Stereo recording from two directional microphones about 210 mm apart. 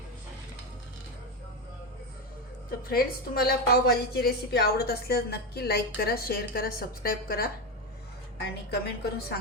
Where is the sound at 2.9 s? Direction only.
45° left (ahead or behind).